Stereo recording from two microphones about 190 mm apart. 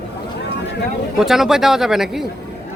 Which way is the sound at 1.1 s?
Centre (ahead or behind).